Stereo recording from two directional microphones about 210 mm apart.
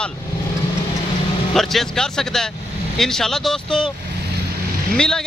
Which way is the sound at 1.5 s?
Centre (ahead or behind).